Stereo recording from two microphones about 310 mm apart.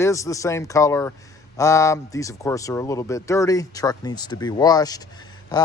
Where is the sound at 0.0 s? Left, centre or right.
Centre.